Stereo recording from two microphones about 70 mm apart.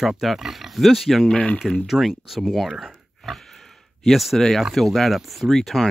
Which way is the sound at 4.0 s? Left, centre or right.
Centre.